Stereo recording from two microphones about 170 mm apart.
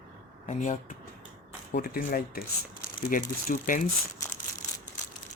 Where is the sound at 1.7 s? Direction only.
60° left (ahead or behind).